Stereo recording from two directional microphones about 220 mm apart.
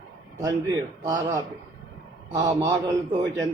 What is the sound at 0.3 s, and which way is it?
Speech, 15° right (ahead or behind).